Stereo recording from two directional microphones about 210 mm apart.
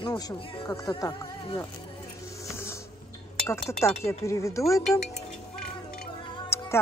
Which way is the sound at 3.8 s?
15° left (ahead or behind).